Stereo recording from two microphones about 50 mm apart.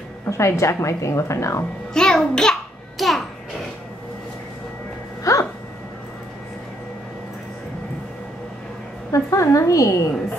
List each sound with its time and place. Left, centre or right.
0.3 s a woman's voice: left
2.0 s a child's voice: centre
3.0 s music: centre
5.2 s a sound: left
9.1 s a woman's voice: left